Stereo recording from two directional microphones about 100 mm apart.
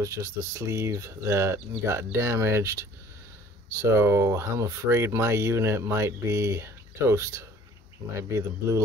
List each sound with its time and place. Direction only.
0.0 s speech: 30° right (ahead or behind)